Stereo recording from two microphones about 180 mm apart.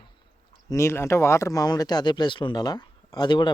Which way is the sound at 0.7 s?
15° left (ahead or behind).